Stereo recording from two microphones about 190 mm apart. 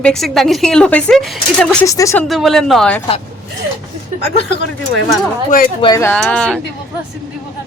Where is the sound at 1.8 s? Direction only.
15° left (ahead or behind).